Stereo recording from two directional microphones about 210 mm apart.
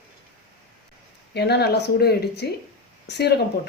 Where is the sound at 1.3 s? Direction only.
50° left (ahead or behind).